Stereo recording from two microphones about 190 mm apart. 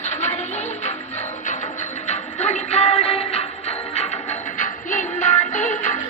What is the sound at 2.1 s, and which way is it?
Music, 35° left (ahead or behind).